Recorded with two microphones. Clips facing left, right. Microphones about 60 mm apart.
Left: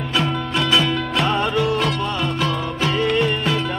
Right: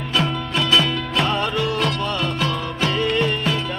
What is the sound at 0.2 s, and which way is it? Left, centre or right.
Music, centre.